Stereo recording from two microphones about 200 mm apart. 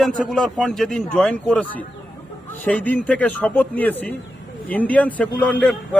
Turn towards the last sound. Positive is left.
turn(degrees=5)  # may be behind; listen again after turning